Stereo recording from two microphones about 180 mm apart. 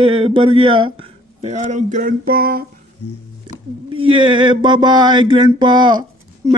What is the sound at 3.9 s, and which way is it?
A man's voice, 30° right (ahead or behind).